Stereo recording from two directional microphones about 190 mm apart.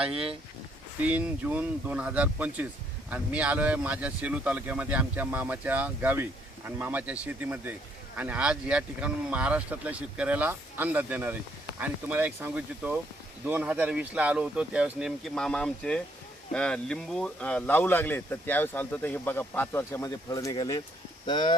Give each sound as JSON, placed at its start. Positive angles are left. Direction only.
{"t": 0.0, "sound": "speech", "side_deg": -5}